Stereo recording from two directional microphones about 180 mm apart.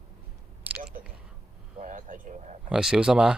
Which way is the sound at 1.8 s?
45° right (ahead or behind).